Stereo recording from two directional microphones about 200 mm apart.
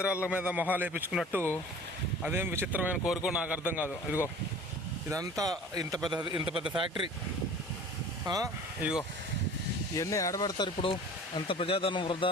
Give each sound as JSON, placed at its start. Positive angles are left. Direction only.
{"t": 0.0, "sound": "a man's voice", "side_deg": -5}
{"t": 8.3, "sound": "a man's voice", "side_deg": -15}
{"t": 9.9, "sound": "a man's voice", "side_deg": 15}